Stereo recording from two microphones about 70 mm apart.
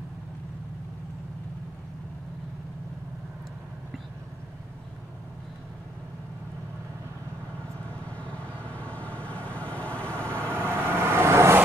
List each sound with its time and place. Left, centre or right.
8.2 s vehicle: centre
10.3 s vehicle: right